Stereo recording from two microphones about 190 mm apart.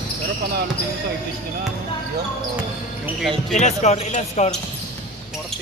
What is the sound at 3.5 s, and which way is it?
Speech, 35° left (ahead or behind).